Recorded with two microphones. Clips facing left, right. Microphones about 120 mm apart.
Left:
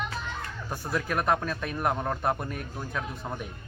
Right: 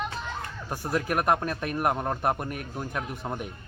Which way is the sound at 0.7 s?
15° right (ahead or behind).